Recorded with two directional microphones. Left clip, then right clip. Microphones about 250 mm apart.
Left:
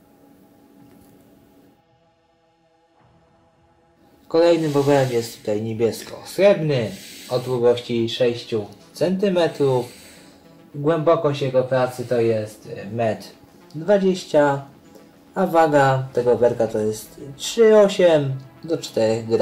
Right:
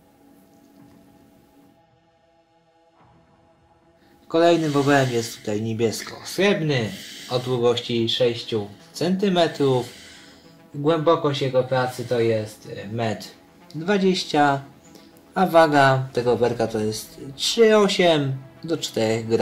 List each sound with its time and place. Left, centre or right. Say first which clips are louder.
4.3 s speech: left 1 dB; right
13.8 s speech: left 3 dB; right